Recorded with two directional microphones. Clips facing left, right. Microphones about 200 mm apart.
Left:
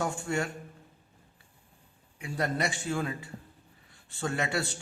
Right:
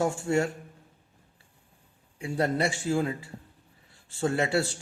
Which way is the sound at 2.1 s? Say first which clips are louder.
Right 4 dB; 30° right (ahead or behind).